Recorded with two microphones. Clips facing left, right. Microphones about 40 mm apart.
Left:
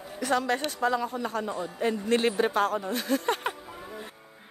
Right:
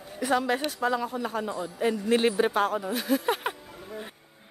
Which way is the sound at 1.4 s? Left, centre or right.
Left.